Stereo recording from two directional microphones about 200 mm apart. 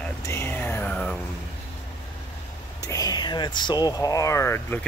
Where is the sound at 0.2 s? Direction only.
10° left (ahead or behind).